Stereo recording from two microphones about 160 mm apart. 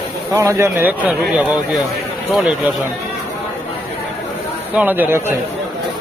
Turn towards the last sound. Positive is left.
turn(degrees=-15)  # may be behind; listen again after turning